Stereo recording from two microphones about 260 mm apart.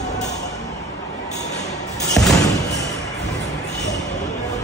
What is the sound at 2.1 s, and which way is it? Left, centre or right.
Music, centre.